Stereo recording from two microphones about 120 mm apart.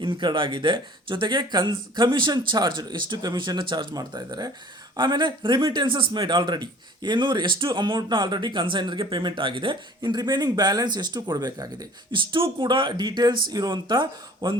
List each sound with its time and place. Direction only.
0.0 s speech: 40° right (ahead or behind)